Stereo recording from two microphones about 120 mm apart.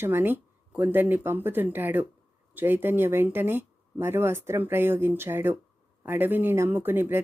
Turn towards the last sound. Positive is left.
turn(degrees=-15)  # may be behind; listen again after turning